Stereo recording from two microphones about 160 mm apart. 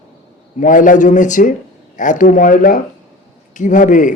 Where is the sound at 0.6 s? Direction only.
55° left (ahead or behind).